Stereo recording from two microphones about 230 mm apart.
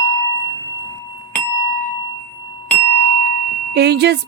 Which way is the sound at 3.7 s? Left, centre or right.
Right.